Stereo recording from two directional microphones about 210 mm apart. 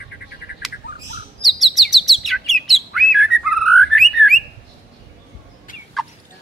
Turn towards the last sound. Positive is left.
turn(degrees=0)  # may be behind; listen again after turning